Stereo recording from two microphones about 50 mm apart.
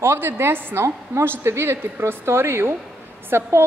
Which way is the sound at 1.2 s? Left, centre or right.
Right.